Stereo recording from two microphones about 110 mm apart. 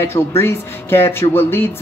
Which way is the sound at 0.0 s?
20° left (ahead or behind).